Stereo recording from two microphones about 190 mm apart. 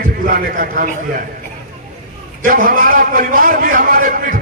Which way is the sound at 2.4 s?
45° right (ahead or behind).